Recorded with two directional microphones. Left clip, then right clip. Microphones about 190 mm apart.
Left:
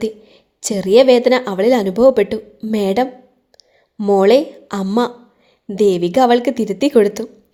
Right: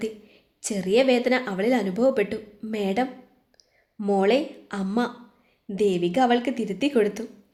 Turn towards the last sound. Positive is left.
turn(degrees=35)  # may be behind; listen again after turning